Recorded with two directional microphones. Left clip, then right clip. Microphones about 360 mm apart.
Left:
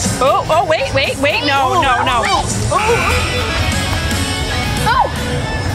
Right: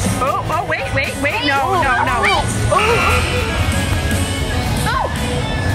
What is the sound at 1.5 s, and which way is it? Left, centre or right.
Speech, centre.